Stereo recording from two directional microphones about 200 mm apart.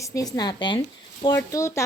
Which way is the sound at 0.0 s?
15° left (ahead or behind).